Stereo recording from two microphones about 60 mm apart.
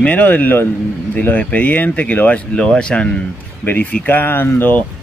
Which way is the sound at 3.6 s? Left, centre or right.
Left.